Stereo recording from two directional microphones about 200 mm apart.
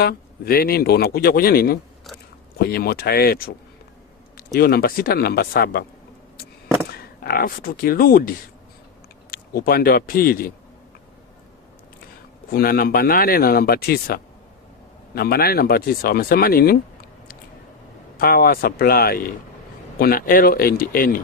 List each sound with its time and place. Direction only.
0.0 s speech: 50° left (ahead or behind)
7.2 s speech: 50° left (ahead or behind)
9.3 s speech: 50° left (ahead or behind)
12.5 s speech: 50° left (ahead or behind)
18.2 s speech: 45° left (ahead or behind)